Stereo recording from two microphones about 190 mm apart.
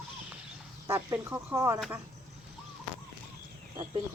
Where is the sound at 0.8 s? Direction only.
15° right (ahead or behind).